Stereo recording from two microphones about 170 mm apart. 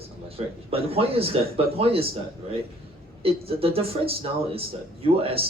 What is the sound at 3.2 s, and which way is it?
Speech, 35° right (ahead or behind).